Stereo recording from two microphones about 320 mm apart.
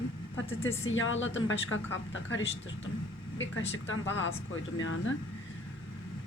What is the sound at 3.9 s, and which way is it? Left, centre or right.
Speech, left.